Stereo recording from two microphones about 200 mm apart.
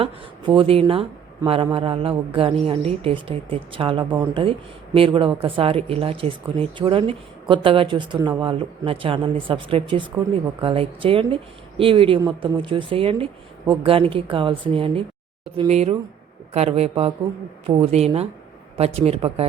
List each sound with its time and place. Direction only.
0.0 s speech: 25° right (ahead or behind)